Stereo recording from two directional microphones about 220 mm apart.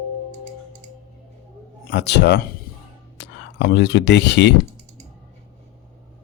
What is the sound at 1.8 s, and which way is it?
A man's voice, 50° left (ahead or behind).